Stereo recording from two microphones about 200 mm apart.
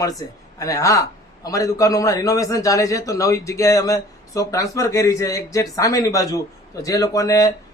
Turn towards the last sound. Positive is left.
turn(degrees=15)  # may be behind; listen again after turning